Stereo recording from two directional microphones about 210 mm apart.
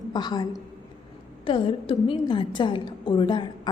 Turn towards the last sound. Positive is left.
turn(degrees=20)  # may be behind; listen again after turning